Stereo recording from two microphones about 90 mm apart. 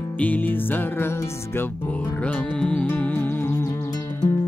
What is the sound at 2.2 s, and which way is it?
Music, 10° left (ahead or behind).